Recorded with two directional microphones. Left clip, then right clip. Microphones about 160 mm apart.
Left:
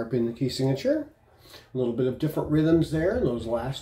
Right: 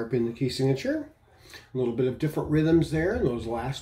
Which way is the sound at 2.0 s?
15° right (ahead or behind).